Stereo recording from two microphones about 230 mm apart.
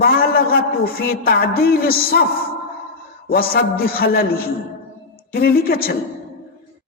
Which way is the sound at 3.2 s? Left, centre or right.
Left.